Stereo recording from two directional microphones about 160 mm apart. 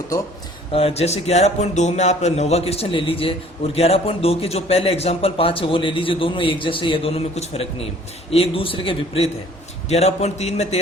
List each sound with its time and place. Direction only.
0.7 s speech: 40° left (ahead or behind)